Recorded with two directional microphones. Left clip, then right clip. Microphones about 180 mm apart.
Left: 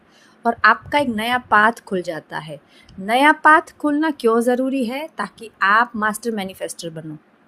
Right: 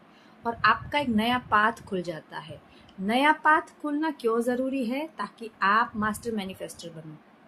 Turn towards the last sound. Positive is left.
turn(degrees=55)  # may be behind; listen again after turning